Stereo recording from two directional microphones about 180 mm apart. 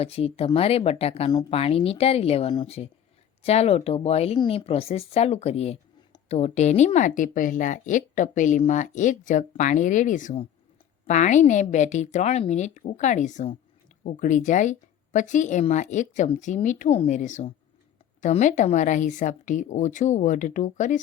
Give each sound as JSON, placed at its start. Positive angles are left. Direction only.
{"t": 0.0, "sound": "a woman's voice", "side_deg": 35}